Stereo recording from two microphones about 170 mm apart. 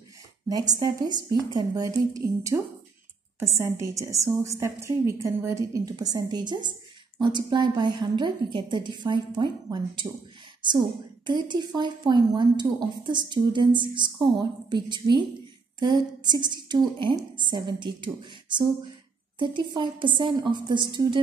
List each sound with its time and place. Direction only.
0.7 s a woman's voice: 25° right (ahead or behind)